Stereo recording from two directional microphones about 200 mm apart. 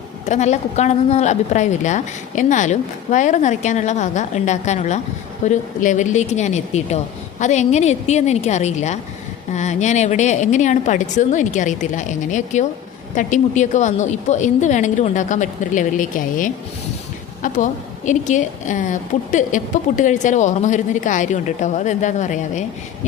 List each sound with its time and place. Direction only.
0.3 s a woman's voice: 35° left (ahead or behind)